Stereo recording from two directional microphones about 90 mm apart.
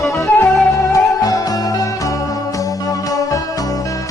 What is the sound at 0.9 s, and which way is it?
Music, 40° left (ahead or behind).